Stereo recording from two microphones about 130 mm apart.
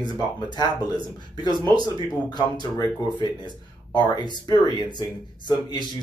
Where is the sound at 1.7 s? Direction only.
35° left (ahead or behind).